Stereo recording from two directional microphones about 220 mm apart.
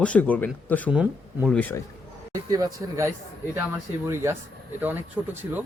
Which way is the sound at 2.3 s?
15° right (ahead or behind).